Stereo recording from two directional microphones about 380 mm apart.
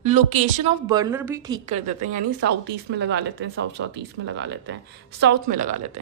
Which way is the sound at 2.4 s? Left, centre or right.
Right.